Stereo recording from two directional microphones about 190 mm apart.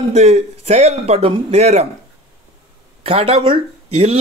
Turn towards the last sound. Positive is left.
turn(degrees=-30)  # may be behind; listen again after turning